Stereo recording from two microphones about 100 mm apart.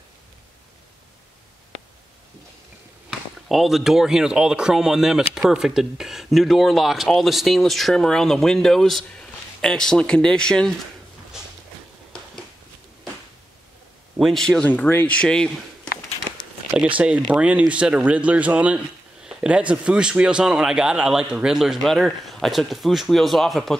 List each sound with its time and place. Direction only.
3.1 s speech: 5° right (ahead or behind)
14.1 s speech: centre (ahead or behind)
14.6 s speech: 15° left (ahead or behind)
16.4 s a sound: 50° left (ahead or behind)
17.0 s speech: 15° right (ahead or behind); by 23.8 s 5° left (ahead or behind)